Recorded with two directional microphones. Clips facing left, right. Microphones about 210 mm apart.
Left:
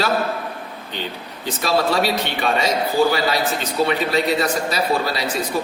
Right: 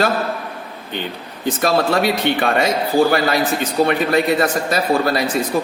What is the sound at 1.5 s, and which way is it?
A man's voice, 50° right (ahead or behind).